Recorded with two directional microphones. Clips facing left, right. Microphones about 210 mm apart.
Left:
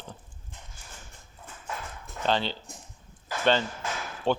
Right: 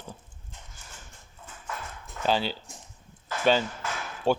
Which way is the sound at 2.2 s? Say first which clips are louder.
Right 1 dB; 10° right (ahead or behind).